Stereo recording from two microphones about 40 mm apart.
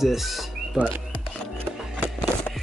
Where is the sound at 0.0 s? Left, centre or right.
Centre.